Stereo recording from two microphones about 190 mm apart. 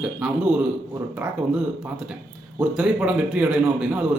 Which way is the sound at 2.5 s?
5° right (ahead or behind).